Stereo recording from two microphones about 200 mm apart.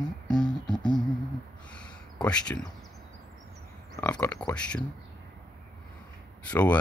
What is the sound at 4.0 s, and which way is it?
Speech, 10° left (ahead or behind).